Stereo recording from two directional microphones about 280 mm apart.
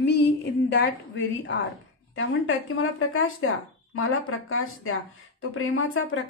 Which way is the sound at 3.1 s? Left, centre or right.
Left.